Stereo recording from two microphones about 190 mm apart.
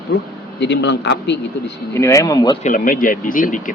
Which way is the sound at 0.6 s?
65° left (ahead or behind).